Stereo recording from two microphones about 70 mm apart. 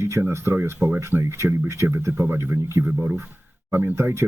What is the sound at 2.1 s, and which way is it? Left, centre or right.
Speech, right.